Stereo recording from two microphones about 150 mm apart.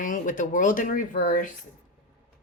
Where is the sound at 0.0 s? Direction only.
60° left (ahead or behind).